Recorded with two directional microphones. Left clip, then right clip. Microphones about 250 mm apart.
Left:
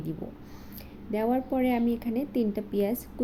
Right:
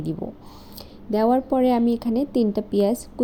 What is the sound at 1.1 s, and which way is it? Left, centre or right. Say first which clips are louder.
A woman's voice: right 8 dB; right.